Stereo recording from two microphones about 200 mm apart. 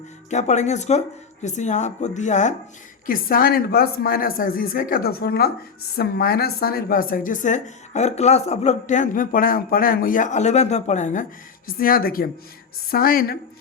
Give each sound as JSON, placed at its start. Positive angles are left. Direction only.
{"t": 0.3, "sound": "a woman's voice", "side_deg": 35}